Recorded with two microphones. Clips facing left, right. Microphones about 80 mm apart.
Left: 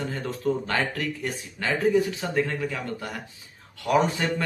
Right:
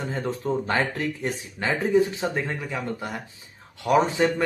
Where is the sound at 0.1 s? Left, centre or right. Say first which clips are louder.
Right 3 dB; right.